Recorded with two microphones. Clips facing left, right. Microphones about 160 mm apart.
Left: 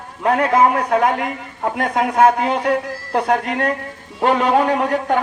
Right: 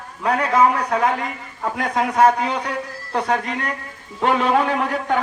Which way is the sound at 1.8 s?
55° left (ahead or behind).